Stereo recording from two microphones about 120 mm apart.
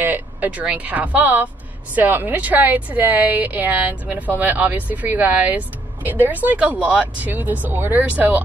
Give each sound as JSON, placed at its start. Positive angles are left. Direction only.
{"t": 0.0, "sound": "a woman's voice", "side_deg": -15}